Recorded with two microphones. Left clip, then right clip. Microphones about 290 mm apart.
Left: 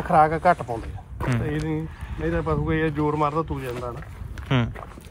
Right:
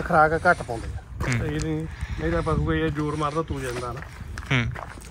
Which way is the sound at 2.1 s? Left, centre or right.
Centre.